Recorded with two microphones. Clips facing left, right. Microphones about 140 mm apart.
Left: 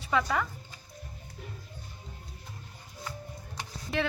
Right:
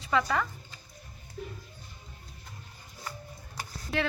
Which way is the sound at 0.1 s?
5° left (ahead or behind).